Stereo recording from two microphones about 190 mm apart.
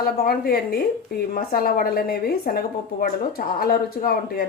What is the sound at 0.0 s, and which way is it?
A woman's voice, 55° left (ahead or behind).